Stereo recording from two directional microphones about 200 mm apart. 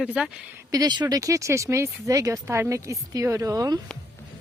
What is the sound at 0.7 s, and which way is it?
A woman's voice, 20° right (ahead or behind).